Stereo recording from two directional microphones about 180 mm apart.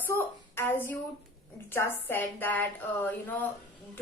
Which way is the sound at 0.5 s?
10° left (ahead or behind).